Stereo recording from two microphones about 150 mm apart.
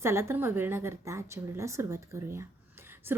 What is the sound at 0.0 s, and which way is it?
A woman's voice, 15° right (ahead or behind).